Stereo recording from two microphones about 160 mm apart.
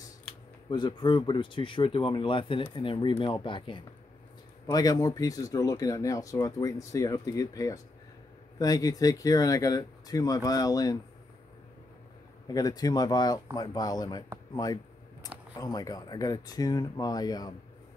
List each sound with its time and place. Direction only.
0.7 s speech: 30° left (ahead or behind)
12.4 s speech: 25° left (ahead or behind)